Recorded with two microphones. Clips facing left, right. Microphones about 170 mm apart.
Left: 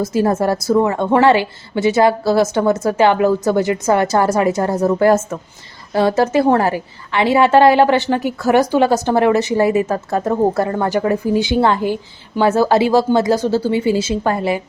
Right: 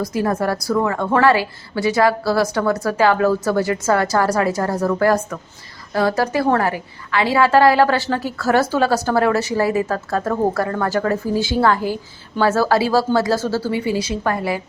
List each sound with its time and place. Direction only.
0.0 s a woman's voice: 25° left (ahead or behind)